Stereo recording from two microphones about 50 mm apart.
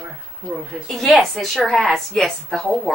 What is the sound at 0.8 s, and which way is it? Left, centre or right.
A woman's voice, centre.